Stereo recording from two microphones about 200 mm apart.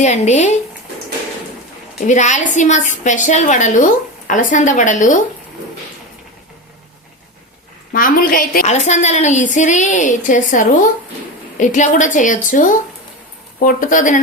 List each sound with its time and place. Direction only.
0.0 s a woman's voice: 35° left (ahead or behind)
2.0 s a woman's voice: 35° left (ahead or behind)
7.9 s a woman's voice: 45° left (ahead or behind)